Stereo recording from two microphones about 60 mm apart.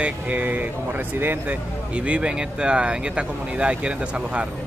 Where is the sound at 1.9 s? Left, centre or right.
Centre.